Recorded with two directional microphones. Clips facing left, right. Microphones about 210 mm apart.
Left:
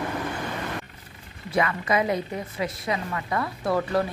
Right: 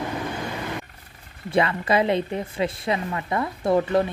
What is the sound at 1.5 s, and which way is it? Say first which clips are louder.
A woman's voice: right 3 dB; 30° right (ahead or behind).